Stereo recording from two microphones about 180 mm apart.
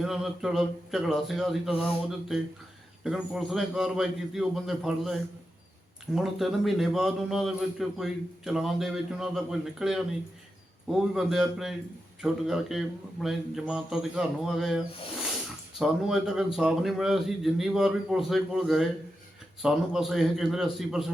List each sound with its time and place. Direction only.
0.0 s a man's voice: centre (ahead or behind)
15.8 s a man's voice: 5° right (ahead or behind)